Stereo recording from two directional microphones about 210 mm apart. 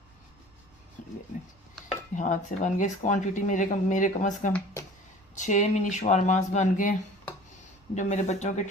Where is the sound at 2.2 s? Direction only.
35° left (ahead or behind).